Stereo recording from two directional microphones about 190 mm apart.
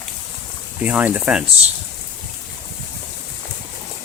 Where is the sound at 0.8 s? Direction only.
10° right (ahead or behind).